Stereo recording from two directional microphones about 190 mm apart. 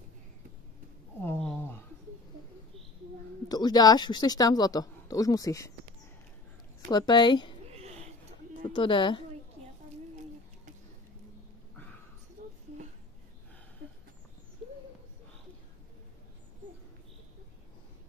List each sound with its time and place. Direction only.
1.2 s a sound: 5° left (ahead or behind)
3.4 s speech: 20° left (ahead or behind)
6.9 s speech: 20° left (ahead or behind)
8.7 s speech: 25° left (ahead or behind)